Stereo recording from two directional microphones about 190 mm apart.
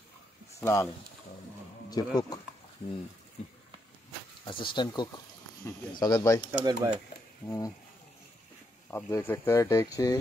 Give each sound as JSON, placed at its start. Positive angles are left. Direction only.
{"t": 0.6, "sound": "speech", "side_deg": 15}
{"t": 1.9, "sound": "speech", "side_deg": 20}
{"t": 4.5, "sound": "speech", "side_deg": 25}
{"t": 6.6, "sound": "speech", "side_deg": -20}
{"t": 7.4, "sound": "speech", "side_deg": 15}
{"t": 8.9, "sound": "speech", "side_deg": 10}